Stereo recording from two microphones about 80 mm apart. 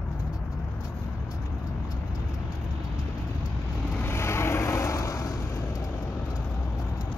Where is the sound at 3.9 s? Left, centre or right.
Left.